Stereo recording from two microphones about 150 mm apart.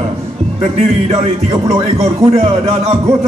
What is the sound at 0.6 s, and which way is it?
A man's voice, 45° right (ahead or behind).